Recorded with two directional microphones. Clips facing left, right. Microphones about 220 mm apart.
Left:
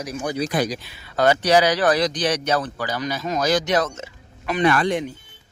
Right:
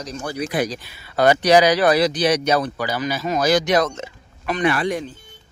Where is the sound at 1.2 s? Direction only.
15° right (ahead or behind).